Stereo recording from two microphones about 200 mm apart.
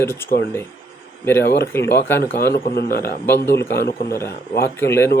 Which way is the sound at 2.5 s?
50° left (ahead or behind).